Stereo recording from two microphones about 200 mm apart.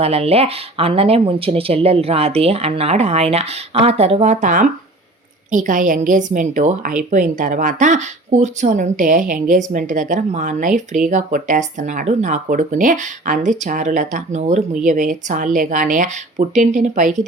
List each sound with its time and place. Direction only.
0.0 s speech: 30° right (ahead or behind)